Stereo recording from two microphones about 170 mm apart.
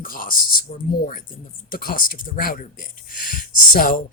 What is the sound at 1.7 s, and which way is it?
Speech, 55° left (ahead or behind).